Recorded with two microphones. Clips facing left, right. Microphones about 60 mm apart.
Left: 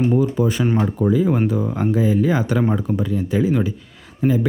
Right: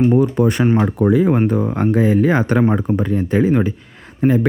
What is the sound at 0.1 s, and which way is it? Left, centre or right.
Speech, right.